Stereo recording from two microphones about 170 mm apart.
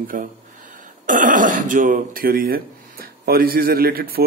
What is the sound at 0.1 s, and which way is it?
A man's voice, 50° right (ahead or behind).